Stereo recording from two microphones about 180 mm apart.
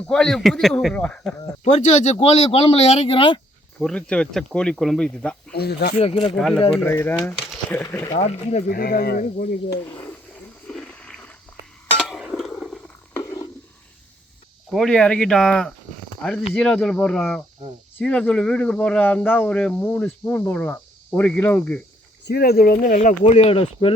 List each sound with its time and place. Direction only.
0.1 s speech: 5° left (ahead or behind)
1.6 s speech: 40° left (ahead or behind)
3.8 s speech: 5° left (ahead or behind)
5.5 s speech: 60° left (ahead or behind)
6.0 s speech: 30° left (ahead or behind)
6.3 s speech: 5° left (ahead or behind)
8.2 s speech: 40° left (ahead or behind)
8.7 s speech: 55° left (ahead or behind)
10.7 s a sound: 5° left (ahead or behind)
13.1 s a sound: 20° left (ahead or behind)
14.7 s speech: 5° left (ahead or behind)
22.2 s speech: 65° left (ahead or behind); by 23.9 s 30° left (ahead or behind)